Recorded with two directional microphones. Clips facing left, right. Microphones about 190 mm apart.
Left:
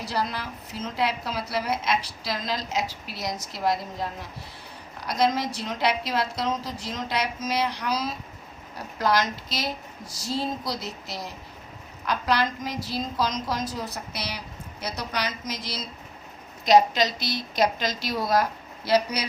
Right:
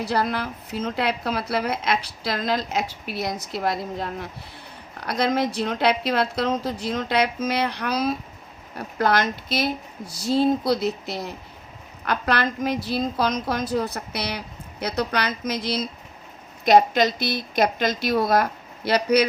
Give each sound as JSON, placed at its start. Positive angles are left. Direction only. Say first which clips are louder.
{"t": 0.0, "sound": "a woman's voice", "louder": "right 5 dB", "side_deg": -55}